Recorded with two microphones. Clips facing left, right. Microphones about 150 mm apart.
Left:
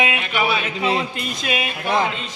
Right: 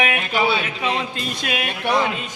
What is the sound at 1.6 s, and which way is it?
Music, 70° right (ahead or behind).